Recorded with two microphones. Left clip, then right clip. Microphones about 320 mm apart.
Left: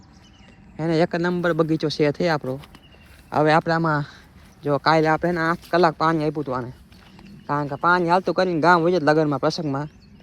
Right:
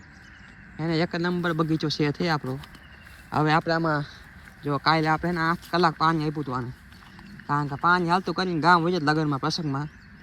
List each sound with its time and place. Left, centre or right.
0.8 s speech: centre
3.6 s speech: left
4.6 s speech: centre